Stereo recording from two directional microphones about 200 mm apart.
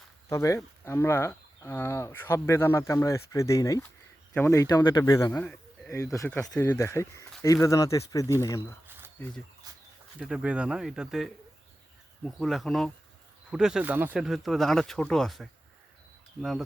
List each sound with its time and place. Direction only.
0.3 s speech: 15° left (ahead or behind)
10.2 s speech: centre (ahead or behind)